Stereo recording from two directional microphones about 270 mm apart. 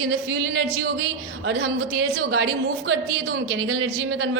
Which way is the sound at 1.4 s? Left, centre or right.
Right.